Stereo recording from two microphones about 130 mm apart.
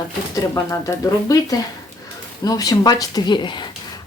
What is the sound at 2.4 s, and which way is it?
Speech, 30° left (ahead or behind).